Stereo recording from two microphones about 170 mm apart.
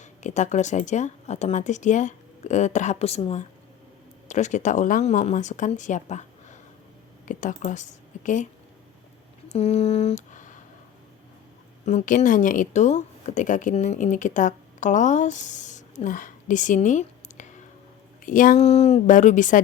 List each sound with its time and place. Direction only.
0.0 s speech: 45° left (ahead or behind)
9.5 s speech: 40° left (ahead or behind)
11.9 s speech: 45° left (ahead or behind)
18.6 s speech: 40° left (ahead or behind)